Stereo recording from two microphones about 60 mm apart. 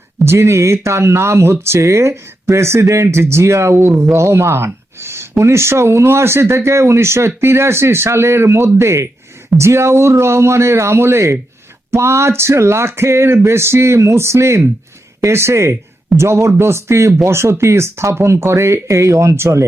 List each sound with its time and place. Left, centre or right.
0.3 s speech: right